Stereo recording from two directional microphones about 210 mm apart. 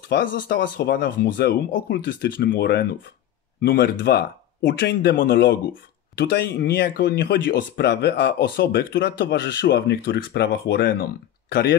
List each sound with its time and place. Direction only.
0.1 s speech: 45° left (ahead or behind)